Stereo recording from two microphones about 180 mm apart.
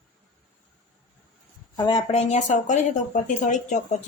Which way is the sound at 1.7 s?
25° left (ahead or behind).